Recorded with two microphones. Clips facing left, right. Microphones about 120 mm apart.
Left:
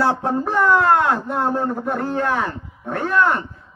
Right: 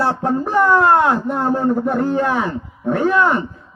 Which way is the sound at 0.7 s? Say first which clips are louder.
Right 3 dB; 25° right (ahead or behind).